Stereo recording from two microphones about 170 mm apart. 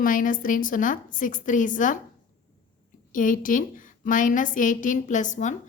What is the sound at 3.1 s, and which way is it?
A woman's voice, 50° left (ahead or behind).